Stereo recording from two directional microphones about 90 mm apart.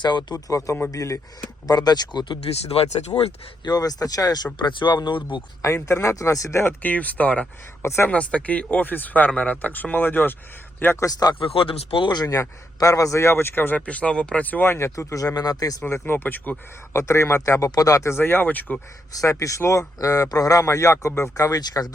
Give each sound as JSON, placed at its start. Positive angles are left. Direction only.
{"t": 0.0, "sound": "speech", "side_deg": 55}
{"t": 0.3, "sound": "speech", "side_deg": 40}
{"t": 3.6, "sound": "speech", "side_deg": 45}
{"t": 4.5, "sound": "speech", "side_deg": 60}
{"t": 5.6, "sound": "speech", "side_deg": 30}
{"t": 7.8, "sound": "speech", "side_deg": 30}
{"t": 8.1, "sound": "speech", "side_deg": 15}
{"t": 11.0, "sound": "speech", "side_deg": 45}
{"t": 11.3, "sound": "speech", "side_deg": 90}
{"t": 12.1, "sound": "speech", "side_deg": 40}
{"t": 15.9, "sound": "speech", "side_deg": 25}
{"t": 18.1, "sound": "speech", "side_deg": 25}
{"t": 19.1, "sound": "speech", "side_deg": 40}
{"t": 21.6, "sound": "speech", "side_deg": 45}